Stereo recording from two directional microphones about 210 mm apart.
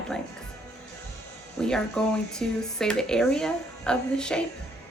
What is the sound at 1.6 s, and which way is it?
Speech, 5° left (ahead or behind).